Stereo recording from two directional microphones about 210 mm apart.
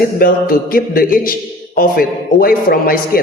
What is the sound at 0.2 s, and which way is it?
A man's voice, 45° left (ahead or behind).